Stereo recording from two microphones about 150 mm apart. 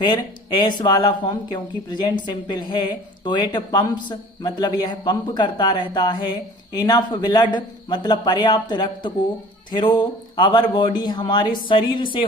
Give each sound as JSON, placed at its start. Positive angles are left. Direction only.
{"t": 0.0, "sound": "speech", "side_deg": 30}